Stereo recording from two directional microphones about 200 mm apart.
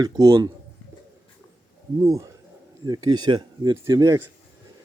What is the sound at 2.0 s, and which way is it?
Speech, 15° right (ahead or behind).